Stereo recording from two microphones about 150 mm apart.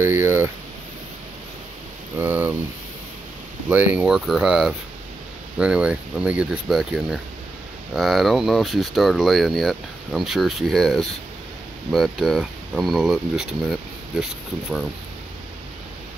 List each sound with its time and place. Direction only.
0.0 s a sound: 15° right (ahead or behind)
2.1 s speech: 15° right (ahead or behind)
3.6 s speech: 10° right (ahead or behind)